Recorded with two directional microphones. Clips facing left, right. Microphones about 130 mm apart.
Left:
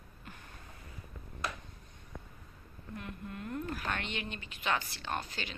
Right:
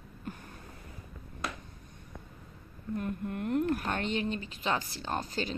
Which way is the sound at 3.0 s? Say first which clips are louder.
Right 8 dB; 50° right (ahead or behind).